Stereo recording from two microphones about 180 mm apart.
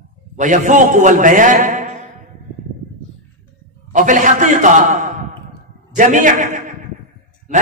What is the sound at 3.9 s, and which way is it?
A man's voice, 45° right (ahead or behind).